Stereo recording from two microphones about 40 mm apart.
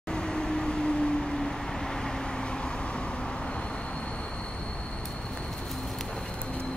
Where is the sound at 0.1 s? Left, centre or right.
Left.